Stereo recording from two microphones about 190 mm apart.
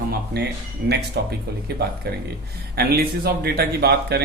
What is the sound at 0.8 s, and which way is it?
Speech, 60° right (ahead or behind).